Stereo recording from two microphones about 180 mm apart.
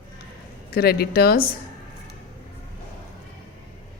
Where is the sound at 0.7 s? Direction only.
60° left (ahead or behind).